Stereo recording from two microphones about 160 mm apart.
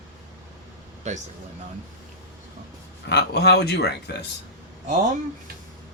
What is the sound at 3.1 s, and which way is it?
Speech, 90° left.